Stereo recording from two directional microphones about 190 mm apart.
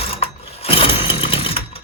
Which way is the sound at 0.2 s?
30° left (ahead or behind).